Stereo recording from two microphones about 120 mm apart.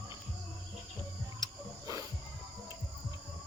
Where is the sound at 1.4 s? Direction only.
30° right (ahead or behind).